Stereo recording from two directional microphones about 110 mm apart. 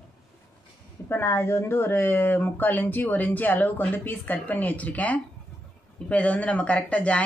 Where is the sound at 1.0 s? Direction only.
20° left (ahead or behind).